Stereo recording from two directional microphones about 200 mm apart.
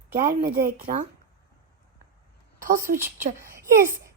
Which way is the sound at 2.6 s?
40° right (ahead or behind).